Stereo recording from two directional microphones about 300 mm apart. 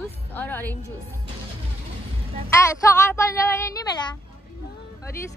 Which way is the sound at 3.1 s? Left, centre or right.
Centre.